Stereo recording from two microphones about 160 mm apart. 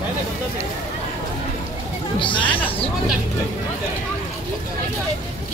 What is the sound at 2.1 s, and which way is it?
Speech, 30° left (ahead or behind).